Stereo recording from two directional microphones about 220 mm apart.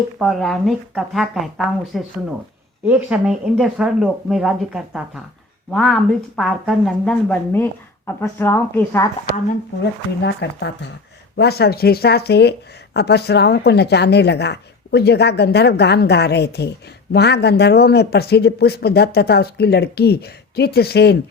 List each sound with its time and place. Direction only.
0.2 s a woman's voice: centre (ahead or behind)
10.2 s speech: 50° left (ahead or behind)